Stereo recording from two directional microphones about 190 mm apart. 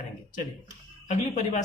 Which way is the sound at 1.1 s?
40° left (ahead or behind).